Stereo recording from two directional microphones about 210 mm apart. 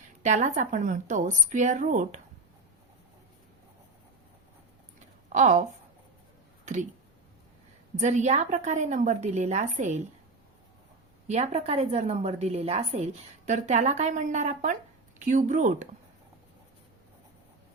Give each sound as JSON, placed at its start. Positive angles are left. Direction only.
{"t": 0.3, "sound": "a woman's voice", "side_deg": -35}
{"t": 5.3, "sound": "a woman's voice", "side_deg": -35}
{"t": 7.9, "sound": "a woman's voice", "side_deg": -35}
{"t": 11.3, "sound": "a woman's voice", "side_deg": -30}